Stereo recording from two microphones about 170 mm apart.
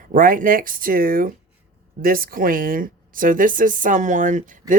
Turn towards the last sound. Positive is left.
turn(degrees=-50)  # may be behind; listen again after turning